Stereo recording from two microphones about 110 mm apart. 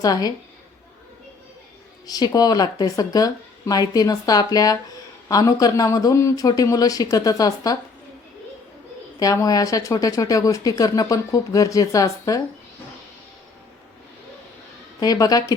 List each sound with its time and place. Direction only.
0.0 s speech: 35° left (ahead or behind)
2.0 s speech: 35° left (ahead or behind)
9.1 s speech: 35° left (ahead or behind)
15.0 s speech: 35° left (ahead or behind)